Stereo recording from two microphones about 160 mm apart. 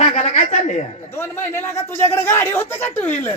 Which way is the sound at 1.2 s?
15° left (ahead or behind).